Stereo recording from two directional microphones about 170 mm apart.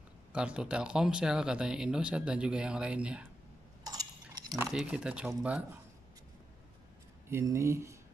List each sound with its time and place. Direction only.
0.3 s speech: 5° right (ahead or behind)
3.8 s cutlery: 20° right (ahead or behind)
4.6 s speech: 5° right (ahead or behind)
7.2 s speech: 15° right (ahead or behind)